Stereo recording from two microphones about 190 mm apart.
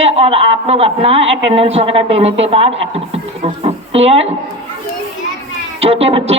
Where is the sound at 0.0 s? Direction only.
35° right (ahead or behind).